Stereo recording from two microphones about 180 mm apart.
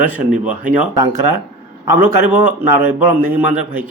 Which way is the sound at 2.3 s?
10° right (ahead or behind).